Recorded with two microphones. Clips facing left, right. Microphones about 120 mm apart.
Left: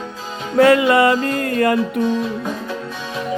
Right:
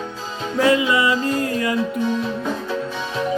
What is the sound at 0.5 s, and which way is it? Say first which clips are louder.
Music: left 5 dB; 60° left (ahead or behind).